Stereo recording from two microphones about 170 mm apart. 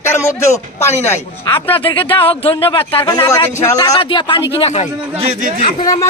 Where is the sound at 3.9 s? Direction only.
30° left (ahead or behind).